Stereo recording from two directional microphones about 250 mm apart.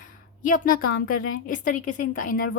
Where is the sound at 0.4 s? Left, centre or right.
Left.